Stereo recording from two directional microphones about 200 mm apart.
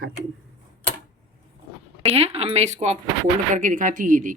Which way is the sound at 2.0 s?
30° right (ahead or behind).